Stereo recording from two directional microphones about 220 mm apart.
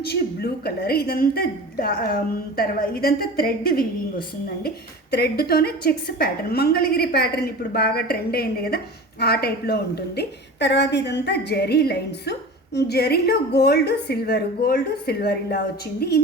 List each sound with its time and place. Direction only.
0.0 s a woman's voice: 45° left (ahead or behind)
5.1 s a woman's voice: 45° left (ahead or behind)